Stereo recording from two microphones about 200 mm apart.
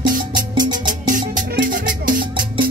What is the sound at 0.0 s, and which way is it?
Music, 45° right (ahead or behind).